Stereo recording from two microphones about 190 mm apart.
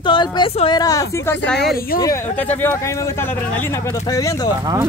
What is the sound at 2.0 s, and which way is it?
Speech, 15° left (ahead or behind).